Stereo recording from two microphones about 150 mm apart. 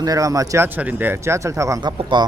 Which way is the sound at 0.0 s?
25° right (ahead or behind).